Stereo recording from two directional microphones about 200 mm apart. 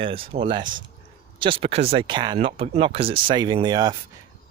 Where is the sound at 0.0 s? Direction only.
25° right (ahead or behind).